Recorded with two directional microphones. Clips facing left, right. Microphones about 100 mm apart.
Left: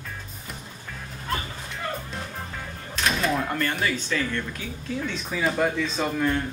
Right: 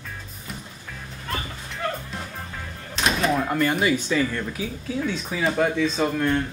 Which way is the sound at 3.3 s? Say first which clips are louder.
Right 4 dB; 5° right (ahead or behind).